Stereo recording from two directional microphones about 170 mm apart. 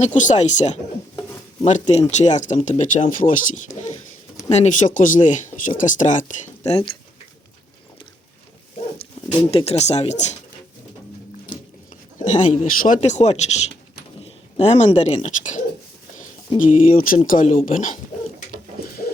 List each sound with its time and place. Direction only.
0.0 s speech: 45° left (ahead or behind)
1.9 s speech: 40° left (ahead or behind)
9.5 s speech: 35° left (ahead or behind)
12.2 s speech: 45° left (ahead or behind)
16.6 s speech: 55° left (ahead or behind)